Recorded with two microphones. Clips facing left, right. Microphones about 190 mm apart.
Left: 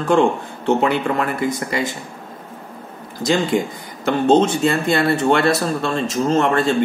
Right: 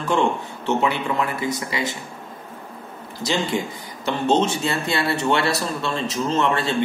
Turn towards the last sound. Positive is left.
turn(degrees=50)  # may be behind; listen again after turning